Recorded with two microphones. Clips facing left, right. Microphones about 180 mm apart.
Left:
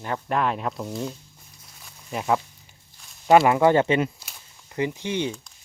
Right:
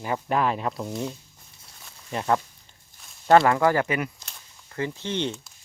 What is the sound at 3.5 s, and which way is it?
Speech, 25° left (ahead or behind).